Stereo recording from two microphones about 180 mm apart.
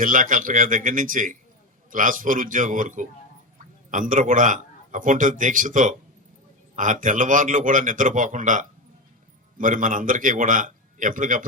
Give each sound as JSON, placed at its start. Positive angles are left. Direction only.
{"t": 0.0, "sound": "a man's voice", "side_deg": -45}